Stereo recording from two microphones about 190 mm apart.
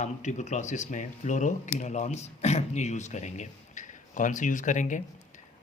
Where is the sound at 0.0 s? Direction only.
40° left (ahead or behind).